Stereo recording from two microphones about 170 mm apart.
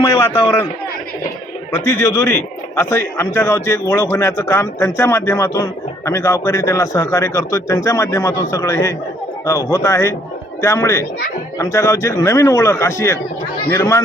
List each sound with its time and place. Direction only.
0.0 s a man's voice: 20° left (ahead or behind)
1.7 s a man's voice: 15° left (ahead or behind)